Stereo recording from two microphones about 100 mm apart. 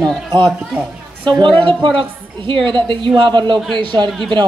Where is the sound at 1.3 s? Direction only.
50° right (ahead or behind).